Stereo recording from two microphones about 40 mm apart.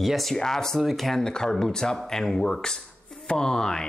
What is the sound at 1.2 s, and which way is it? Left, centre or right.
Speech, centre.